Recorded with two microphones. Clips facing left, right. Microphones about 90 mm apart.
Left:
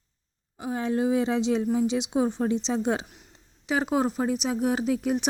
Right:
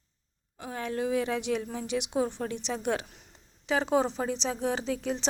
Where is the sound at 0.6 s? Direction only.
20° left (ahead or behind).